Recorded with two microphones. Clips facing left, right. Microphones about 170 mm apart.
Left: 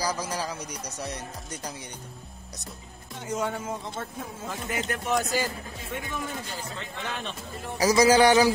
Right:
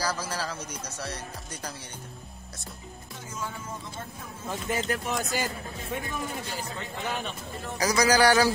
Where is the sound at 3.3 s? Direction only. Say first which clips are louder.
Left 8 dB; 75° left (ahead or behind).